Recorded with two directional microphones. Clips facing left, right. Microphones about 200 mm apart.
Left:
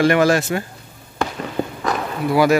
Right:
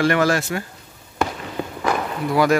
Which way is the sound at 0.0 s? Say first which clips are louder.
Left 3 dB; 15° left (ahead or behind).